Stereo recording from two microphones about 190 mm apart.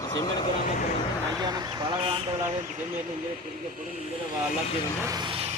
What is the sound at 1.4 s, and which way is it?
Speech, 20° right (ahead or behind).